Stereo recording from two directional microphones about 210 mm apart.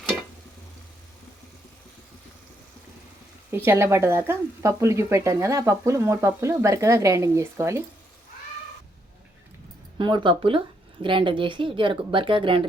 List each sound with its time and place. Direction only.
3.5 s speech: 10° right (ahead or behind)
10.0 s speech: 20° right (ahead or behind)